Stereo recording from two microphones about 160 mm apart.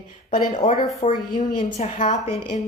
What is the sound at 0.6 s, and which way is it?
A man's voice, 35° left (ahead or behind).